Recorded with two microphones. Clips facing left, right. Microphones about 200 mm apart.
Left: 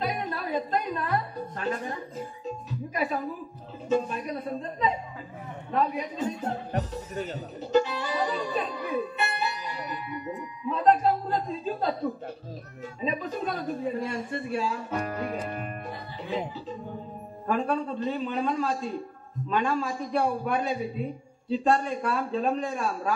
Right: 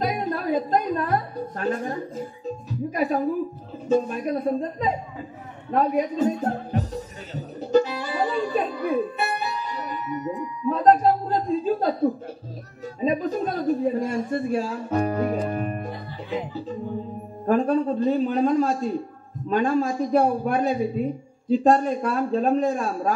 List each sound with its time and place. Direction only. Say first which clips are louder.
0.0 s a woman's voice: right 6 dB; 40° right (ahead or behind)
7.7 s music: right 4 dB; 45° right (ahead or behind)
10.7 s a sound: right 5 dB; 45° right (ahead or behind)
13.0 s a man's voice: right 7 dB; 45° right (ahead or behind)
17.5 s a man's voice: right 7 dB; 45° right (ahead or behind)